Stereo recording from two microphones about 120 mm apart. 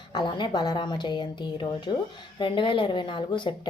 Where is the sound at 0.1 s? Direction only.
40° left (ahead or behind).